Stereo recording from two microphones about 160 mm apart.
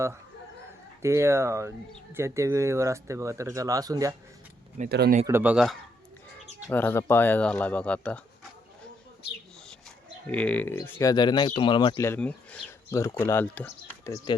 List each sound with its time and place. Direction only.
1.0 s speech: 15° right (ahead or behind)
4.9 s speech: 80° right
5.2 s speech: 15° right (ahead or behind)
6.7 s speech: 10° left (ahead or behind)
10.2 s speech: 10° left (ahead or behind)
11.1 s speech: 25° left (ahead or behind)
11.9 s speech: 15° left (ahead or behind)
12.9 s speech: 20° left (ahead or behind)